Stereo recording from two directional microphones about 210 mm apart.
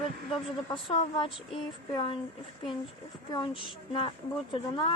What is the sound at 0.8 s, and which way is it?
Speech, 25° left (ahead or behind).